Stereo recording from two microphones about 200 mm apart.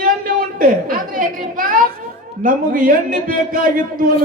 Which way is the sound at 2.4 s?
45° right (ahead or behind).